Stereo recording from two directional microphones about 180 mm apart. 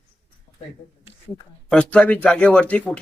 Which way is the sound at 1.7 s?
5° left (ahead or behind).